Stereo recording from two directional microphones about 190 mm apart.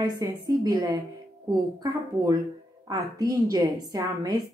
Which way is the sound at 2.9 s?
20° right (ahead or behind).